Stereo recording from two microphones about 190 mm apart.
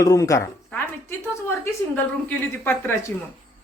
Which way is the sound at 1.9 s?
10° left (ahead or behind).